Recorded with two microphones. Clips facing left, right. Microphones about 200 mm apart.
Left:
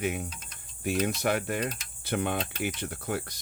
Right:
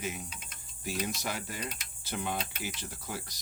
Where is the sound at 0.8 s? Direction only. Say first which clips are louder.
Left 8 dB; 60° left (ahead or behind).